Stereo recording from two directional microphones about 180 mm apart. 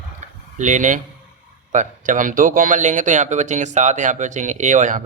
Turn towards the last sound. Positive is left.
turn(degrees=-45)  # may be behind; listen again after turning